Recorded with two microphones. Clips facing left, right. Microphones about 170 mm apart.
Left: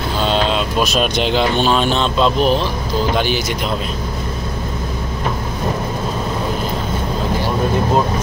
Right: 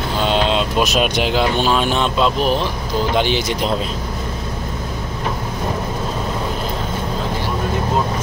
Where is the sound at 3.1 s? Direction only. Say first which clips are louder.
Right 3 dB; 20° right (ahead or behind).